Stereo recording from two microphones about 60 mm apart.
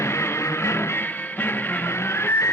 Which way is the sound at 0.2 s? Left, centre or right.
Left.